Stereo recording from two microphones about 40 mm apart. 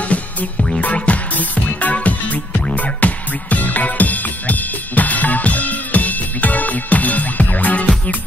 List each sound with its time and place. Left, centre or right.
0.9 s music: left